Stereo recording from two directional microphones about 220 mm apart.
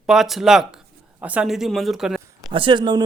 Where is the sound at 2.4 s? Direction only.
20° right (ahead or behind).